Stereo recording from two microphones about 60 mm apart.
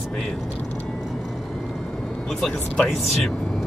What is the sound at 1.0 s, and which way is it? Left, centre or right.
Vehicle, centre.